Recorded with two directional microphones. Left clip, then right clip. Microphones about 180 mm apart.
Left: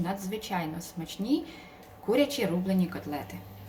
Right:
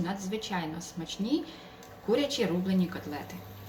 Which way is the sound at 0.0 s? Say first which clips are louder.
Left 1 dB; 40° left (ahead or behind).